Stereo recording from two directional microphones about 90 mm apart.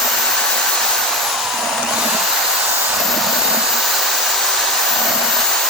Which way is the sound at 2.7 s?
25° right (ahead or behind).